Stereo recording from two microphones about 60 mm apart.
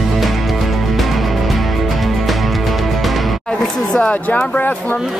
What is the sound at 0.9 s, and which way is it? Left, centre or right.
Music, centre.